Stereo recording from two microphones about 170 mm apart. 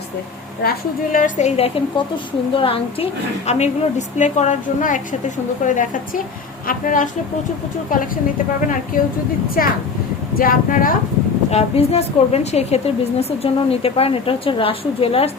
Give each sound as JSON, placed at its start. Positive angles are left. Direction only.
{"t": 0.6, "sound": "speech", "side_deg": 65}
{"t": 1.1, "sound": "a woman's voice", "side_deg": 45}
{"t": 11.5, "sound": "a woman's voice", "side_deg": 35}